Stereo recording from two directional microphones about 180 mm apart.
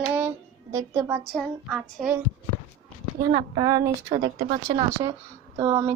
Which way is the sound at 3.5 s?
20° right (ahead or behind).